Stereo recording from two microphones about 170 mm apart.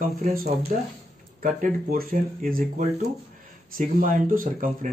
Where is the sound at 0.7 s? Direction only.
50° right (ahead or behind).